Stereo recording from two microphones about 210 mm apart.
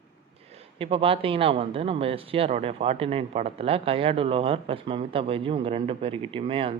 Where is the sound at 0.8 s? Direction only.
25° right (ahead or behind).